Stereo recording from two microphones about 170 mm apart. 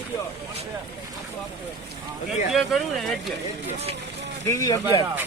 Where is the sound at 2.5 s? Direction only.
Centre (ahead or behind).